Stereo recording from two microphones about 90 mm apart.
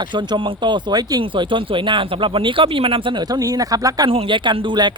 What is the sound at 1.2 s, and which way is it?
Speech, 70° right (ahead or behind).